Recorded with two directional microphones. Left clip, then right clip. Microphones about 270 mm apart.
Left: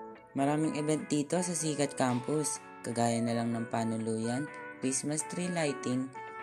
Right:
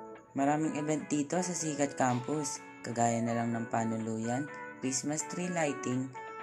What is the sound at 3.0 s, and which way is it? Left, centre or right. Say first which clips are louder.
Speech: right 1 dB; left.